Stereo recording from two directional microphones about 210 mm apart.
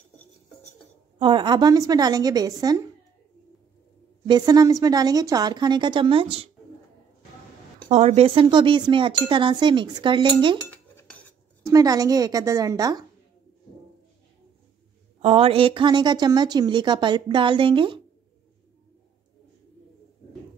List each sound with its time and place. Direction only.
1.2 s speech: 20° right (ahead or behind)
4.3 s speech: 20° right (ahead or behind)
7.9 s speech: 30° right (ahead or behind)
10.7 s cutlery: 5° left (ahead or behind)
11.7 s a woman's voice: 15° right (ahead or behind)
15.2 s speech: 30° right (ahead or behind)